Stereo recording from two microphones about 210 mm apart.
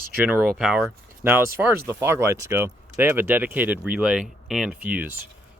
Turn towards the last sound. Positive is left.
turn(degrees=-5)  # may be behind; listen again after turning